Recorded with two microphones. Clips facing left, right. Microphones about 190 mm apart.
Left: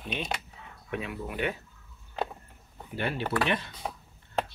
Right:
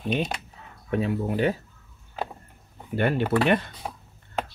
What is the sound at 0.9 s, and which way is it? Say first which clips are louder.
Speech: right 9 dB; 35° right (ahead or behind).